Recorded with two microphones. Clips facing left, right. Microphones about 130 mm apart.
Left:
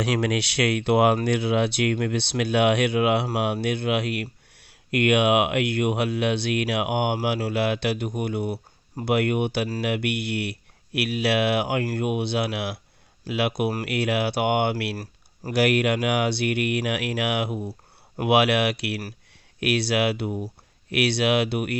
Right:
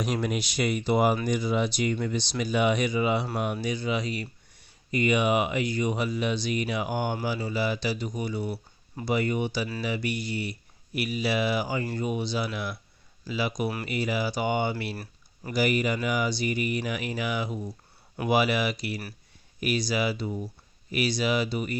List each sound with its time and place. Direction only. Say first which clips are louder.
0.0 s speech: left 4 dB; 80° left
14.9 s a sound: left 4 dB; 40° left (ahead or behind)
15.5 s speech: left 4 dB; 70° left (ahead or behind)